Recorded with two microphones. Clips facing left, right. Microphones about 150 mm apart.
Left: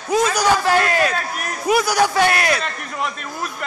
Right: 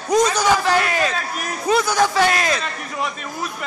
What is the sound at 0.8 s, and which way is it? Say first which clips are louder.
Speech: left 2 dB; 20° right (ahead or behind).